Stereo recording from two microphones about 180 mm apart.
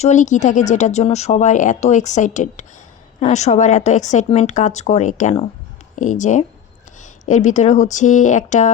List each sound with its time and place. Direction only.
0.0 s speech: 40° left (ahead or behind)